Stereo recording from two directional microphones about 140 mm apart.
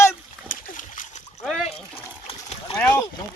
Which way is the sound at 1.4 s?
Centre (ahead or behind).